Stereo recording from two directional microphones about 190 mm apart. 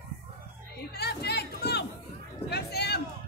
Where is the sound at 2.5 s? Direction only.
60° left (ahead or behind).